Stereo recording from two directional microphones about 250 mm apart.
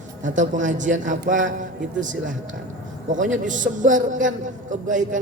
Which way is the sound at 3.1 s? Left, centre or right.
Right.